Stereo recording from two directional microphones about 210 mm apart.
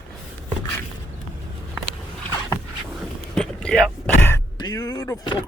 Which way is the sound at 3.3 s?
5° left (ahead or behind).